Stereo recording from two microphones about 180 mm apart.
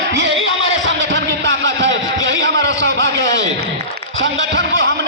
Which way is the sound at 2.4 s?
90° right.